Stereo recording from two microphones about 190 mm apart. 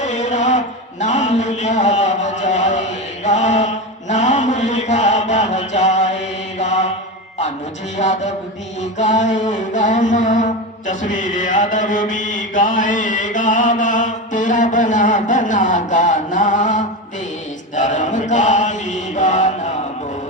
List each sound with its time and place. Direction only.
0.0 s mantra: 40° left (ahead or behind)
7.9 s mantra: 40° left (ahead or behind)
17.7 s chant: 40° left (ahead or behind)